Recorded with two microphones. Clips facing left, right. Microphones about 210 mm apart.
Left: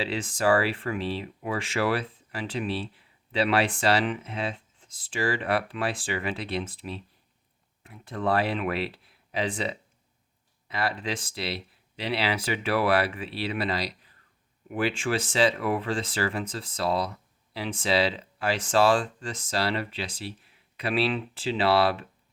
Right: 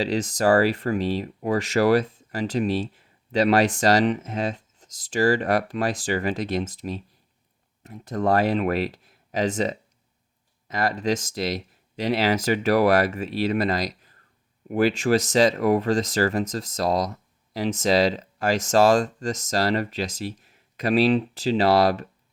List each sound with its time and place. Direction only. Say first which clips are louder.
0.0 s speech: right 4 dB; 40° right (ahead or behind)